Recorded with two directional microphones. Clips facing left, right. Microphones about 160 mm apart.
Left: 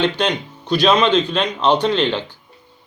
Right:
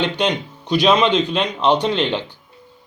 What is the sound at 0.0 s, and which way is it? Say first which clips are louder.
A man's voice: left 1 dB; 15° right (ahead or behind).